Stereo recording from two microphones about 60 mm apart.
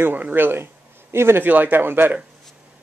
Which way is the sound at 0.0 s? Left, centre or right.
Right.